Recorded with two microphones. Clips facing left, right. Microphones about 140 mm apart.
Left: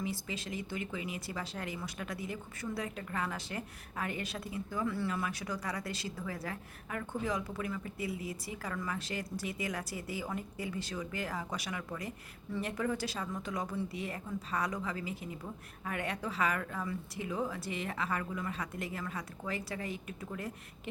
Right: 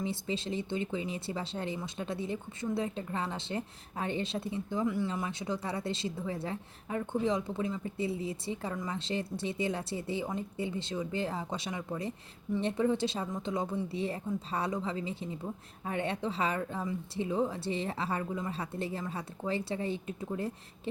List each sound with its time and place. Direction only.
0.0 s speech: 30° right (ahead or behind)